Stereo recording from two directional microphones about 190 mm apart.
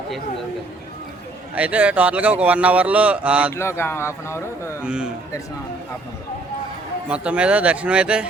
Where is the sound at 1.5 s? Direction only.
5° right (ahead or behind).